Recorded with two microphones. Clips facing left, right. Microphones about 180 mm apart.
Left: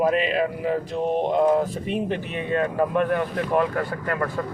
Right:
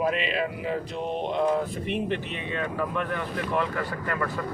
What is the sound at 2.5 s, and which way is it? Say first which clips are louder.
A man's voice: left 8 dB; 45° left (ahead or behind).